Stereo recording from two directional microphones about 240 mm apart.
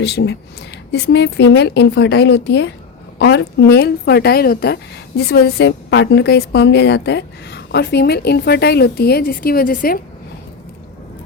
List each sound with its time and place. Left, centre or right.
0.0 s a woman's voice: left